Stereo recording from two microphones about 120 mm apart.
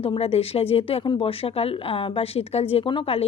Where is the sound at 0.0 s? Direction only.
55° left (ahead or behind).